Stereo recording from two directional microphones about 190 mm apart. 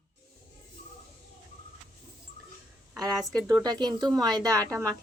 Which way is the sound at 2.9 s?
Centre (ahead or behind).